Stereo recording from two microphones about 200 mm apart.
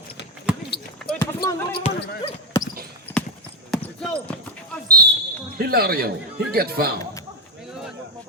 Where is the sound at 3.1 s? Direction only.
10° left (ahead or behind).